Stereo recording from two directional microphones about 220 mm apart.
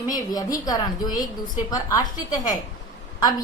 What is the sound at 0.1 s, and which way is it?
Speech, 15° left (ahead or behind).